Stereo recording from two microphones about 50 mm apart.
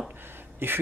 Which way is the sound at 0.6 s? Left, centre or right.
Right.